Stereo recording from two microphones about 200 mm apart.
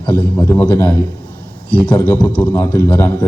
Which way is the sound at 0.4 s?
10° left (ahead or behind).